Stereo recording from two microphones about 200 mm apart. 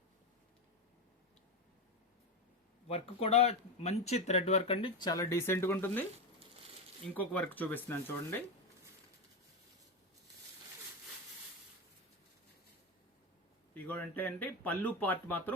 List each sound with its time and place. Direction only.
2.8 s speech: 30° left (ahead or behind); by 6.1 s 10° left (ahead or behind)
7.1 s speech: 10° left (ahead or behind)
13.7 s speech: 10° left (ahead or behind)